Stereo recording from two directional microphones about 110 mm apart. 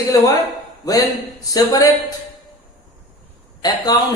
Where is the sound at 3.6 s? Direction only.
40° left (ahead or behind).